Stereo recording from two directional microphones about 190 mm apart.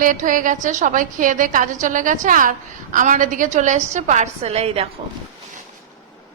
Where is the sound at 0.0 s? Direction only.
45° right (ahead or behind).